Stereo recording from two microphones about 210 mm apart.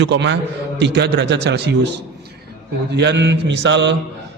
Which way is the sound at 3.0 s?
55° right (ahead or behind).